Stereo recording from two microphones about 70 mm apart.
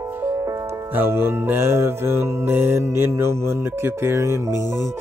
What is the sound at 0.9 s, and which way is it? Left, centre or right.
Music, right.